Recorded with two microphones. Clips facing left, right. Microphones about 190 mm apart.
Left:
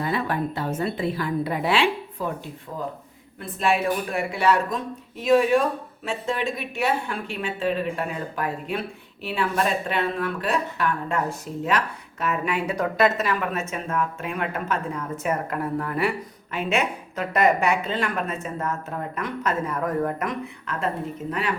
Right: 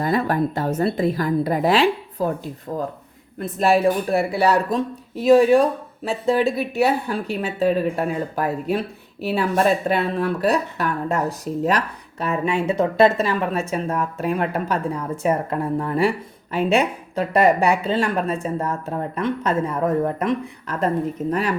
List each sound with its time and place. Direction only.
0.0 s speech: 40° right (ahead or behind)